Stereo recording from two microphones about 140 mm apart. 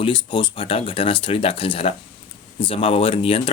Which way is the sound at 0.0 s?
35° left (ahead or behind).